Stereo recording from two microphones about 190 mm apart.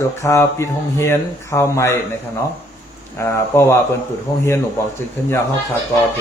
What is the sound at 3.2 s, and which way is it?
Speech, 15° left (ahead or behind).